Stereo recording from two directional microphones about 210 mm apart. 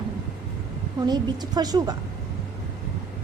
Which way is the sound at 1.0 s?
20° right (ahead or behind).